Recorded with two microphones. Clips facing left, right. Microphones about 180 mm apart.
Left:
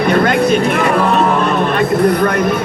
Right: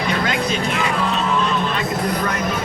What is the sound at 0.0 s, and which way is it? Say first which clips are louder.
Music: left 9 dB; 60° left (ahead or behind).